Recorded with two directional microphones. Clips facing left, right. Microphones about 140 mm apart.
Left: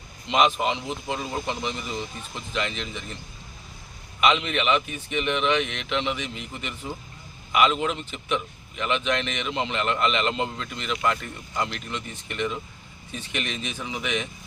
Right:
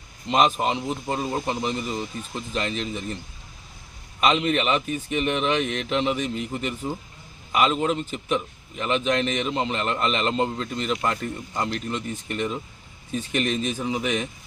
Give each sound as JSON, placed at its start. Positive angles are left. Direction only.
{"t": 0.3, "sound": "a man's voice", "side_deg": -40}
{"t": 4.2, "sound": "a man's voice", "side_deg": -40}